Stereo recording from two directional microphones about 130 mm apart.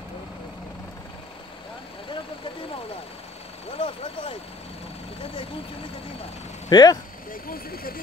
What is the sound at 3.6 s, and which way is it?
Vehicle, 50° left (ahead or behind).